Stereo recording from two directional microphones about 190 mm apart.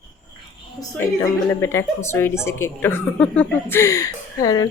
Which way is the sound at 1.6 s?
15° left (ahead or behind).